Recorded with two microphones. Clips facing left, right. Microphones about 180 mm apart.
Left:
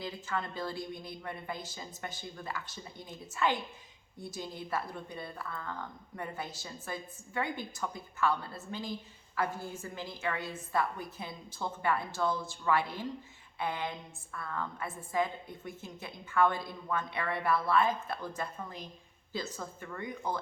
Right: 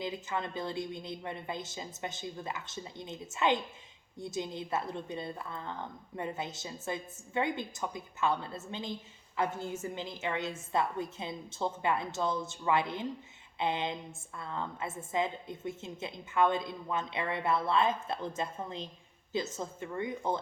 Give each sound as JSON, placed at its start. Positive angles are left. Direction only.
{"t": 0.0, "sound": "a woman's voice", "side_deg": -20}